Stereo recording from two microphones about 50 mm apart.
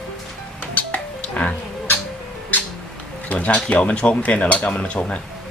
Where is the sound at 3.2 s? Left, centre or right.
Left.